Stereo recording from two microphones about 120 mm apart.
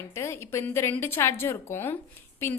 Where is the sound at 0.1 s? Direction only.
25° left (ahead or behind).